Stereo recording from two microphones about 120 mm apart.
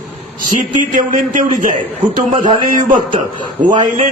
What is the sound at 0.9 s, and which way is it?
Speech, 90° right.